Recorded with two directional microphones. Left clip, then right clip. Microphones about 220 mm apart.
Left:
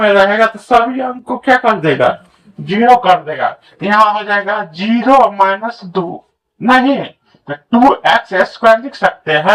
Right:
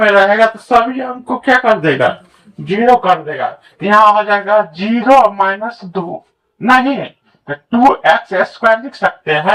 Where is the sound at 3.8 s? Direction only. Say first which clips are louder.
Right 2 dB; 15° left (ahead or behind).